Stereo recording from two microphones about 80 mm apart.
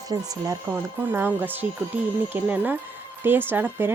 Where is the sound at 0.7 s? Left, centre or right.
Right.